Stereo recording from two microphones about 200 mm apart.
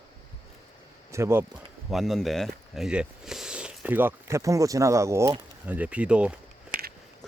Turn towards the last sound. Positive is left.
turn(degrees=0)  # may be behind; listen again after turning